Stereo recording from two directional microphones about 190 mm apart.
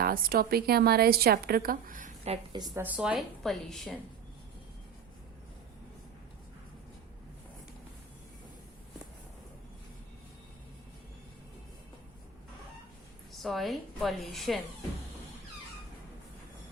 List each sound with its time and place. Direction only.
0.0 s a woman's voice: 50° right (ahead or behind); by 2.8 s 20° right (ahead or behind)
2.8 s a woman's voice: 5° right (ahead or behind)
13.3 s a woman's voice: centre (ahead or behind)